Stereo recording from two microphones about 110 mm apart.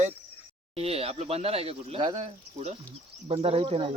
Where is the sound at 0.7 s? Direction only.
65° right (ahead or behind).